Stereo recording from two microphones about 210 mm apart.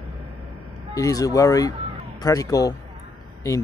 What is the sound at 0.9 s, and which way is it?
Speech, 15° left (ahead or behind).